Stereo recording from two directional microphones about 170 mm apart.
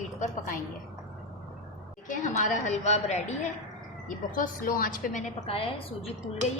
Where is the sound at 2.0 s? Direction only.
50° left (ahead or behind).